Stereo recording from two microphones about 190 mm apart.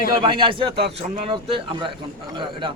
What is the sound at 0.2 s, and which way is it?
Speech, 25° right (ahead or behind).